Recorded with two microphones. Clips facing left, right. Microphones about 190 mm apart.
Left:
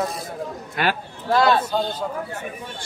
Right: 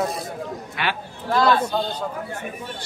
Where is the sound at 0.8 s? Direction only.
45° left (ahead or behind).